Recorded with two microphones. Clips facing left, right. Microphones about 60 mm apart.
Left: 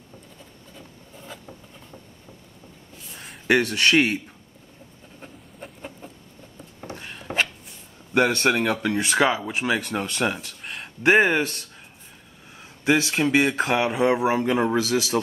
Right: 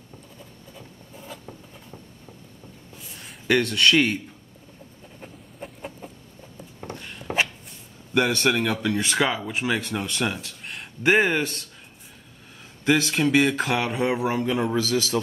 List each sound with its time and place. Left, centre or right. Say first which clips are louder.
0.7 s a sound: even; centre
3.4 s speech: even; centre
5.2 s a sound: right 2 dB; centre
7.3 s a sound: even; centre
8.1 s speech: left 2 dB; left
9.1 s speech: left 3 dB; centre
9.8 s speech: left 2 dB; centre
10.6 s speech: left 2 dB; centre
12.8 s speech: even; centre
14.4 s a man's voice: left 2 dB; left
14.8 s speech: left 1 dB; centre